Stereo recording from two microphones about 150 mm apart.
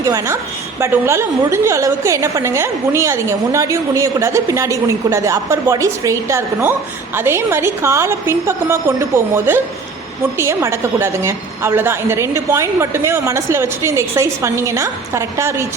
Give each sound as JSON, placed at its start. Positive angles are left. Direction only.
{"t": 0.0, "sound": "a woman's voice", "side_deg": -20}